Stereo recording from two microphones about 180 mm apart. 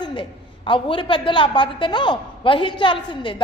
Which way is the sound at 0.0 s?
25° left (ahead or behind).